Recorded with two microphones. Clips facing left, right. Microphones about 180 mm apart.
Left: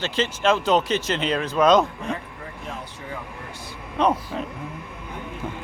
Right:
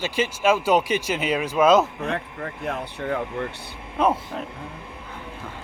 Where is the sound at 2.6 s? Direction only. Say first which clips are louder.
Right 8 dB; 70° right (ahead or behind).